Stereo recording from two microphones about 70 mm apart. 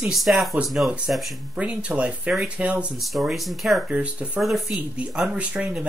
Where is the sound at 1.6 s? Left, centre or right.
Centre.